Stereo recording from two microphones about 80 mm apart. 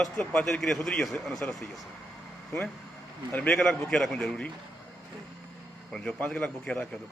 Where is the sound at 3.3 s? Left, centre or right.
Left.